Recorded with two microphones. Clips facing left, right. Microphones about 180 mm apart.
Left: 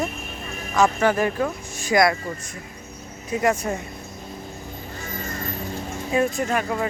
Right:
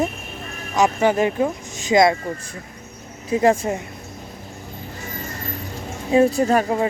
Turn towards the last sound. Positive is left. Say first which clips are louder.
# right 6 dB
turn(degrees=-35)  # may be behind; listen again after turning